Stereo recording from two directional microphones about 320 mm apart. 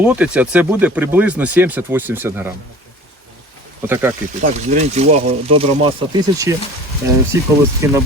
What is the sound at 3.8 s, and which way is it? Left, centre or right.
Speech, centre.